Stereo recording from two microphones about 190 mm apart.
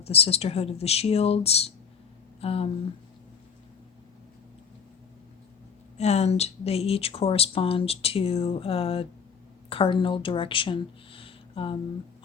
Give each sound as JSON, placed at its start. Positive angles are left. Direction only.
{"t": 0.0, "sound": "speech", "side_deg": 30}
{"t": 6.0, "sound": "speech", "side_deg": 35}